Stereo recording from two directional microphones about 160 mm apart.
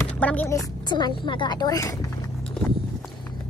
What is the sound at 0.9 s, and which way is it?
A woman's voice, 25° left (ahead or behind).